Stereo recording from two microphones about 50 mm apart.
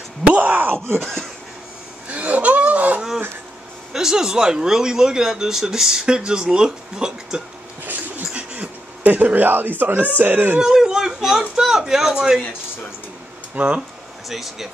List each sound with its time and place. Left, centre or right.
0.3 s groan: right
2.0 s a sound: right
3.9 s speech: centre
7.8 s dog: right
8.4 s speech: right
10.6 s speech: centre
13.6 s speech: right
14.3 s speech: centre